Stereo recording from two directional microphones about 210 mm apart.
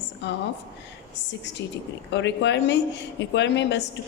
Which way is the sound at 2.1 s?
55° left (ahead or behind).